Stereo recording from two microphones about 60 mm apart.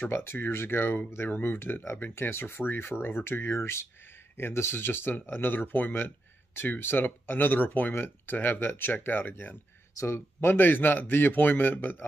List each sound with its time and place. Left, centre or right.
0.1 s speech: left
3.5 s speech: left
9.9 s speech: left